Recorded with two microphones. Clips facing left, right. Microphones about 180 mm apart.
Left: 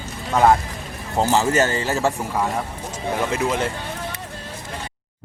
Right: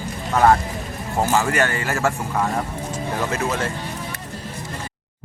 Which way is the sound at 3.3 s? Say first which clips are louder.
Left 2 dB; 15° left (ahead or behind).